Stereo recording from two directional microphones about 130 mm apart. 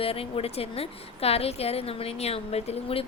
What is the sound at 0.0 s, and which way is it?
A woman's voice, 45° left (ahead or behind).